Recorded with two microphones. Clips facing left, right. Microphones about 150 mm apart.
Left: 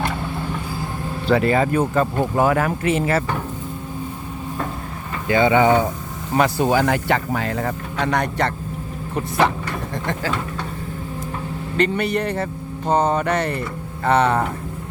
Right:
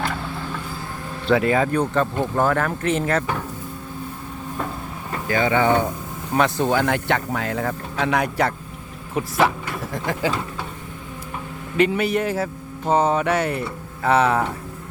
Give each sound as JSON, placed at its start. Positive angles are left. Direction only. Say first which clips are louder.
{"t": 0.0, "sound": "vehicle", "louder": "left 2 dB", "side_deg": 20}
{"t": 1.3, "sound": "speech", "louder": "left 1 dB", "side_deg": 0}
{"t": 5.3, "sound": "speech", "louder": "left 3 dB", "side_deg": 20}
{"t": 11.8, "sound": "speech", "louder": "right 1 dB", "side_deg": -5}